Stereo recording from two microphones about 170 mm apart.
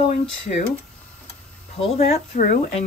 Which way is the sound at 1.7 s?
40° left (ahead or behind).